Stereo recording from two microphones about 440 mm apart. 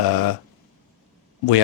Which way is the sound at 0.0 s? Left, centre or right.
Left.